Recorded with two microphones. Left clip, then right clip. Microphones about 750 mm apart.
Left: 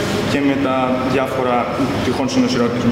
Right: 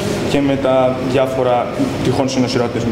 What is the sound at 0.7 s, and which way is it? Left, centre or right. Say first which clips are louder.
Speech: right 3 dB; right.